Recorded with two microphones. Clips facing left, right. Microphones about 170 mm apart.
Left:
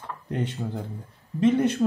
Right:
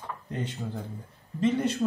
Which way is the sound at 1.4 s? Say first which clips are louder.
Left 5 dB; 60° left (ahead or behind).